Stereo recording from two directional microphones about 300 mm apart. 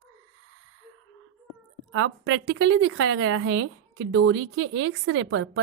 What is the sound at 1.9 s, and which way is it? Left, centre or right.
A woman's voice, right.